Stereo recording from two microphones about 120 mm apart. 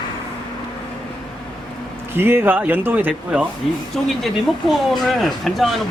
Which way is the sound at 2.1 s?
20° right (ahead or behind).